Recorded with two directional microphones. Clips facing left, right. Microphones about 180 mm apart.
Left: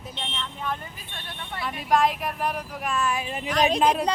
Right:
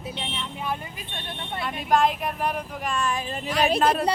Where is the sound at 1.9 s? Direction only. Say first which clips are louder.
Right 1 dB; centre (ahead or behind).